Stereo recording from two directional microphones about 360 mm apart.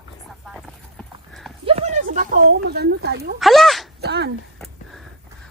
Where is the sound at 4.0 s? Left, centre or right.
Right.